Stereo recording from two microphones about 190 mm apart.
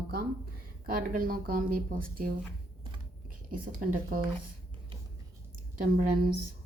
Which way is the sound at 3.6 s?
45° right (ahead or behind).